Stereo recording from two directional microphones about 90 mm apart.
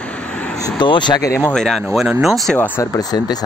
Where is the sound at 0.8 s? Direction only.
60° left (ahead or behind).